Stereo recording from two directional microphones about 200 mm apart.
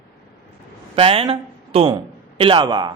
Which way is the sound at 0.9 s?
25° right (ahead or behind).